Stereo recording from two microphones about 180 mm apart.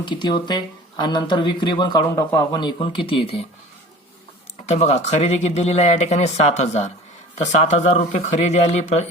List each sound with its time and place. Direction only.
0.0 s speech: 25° left (ahead or behind)
4.6 s speech: 40° left (ahead or behind)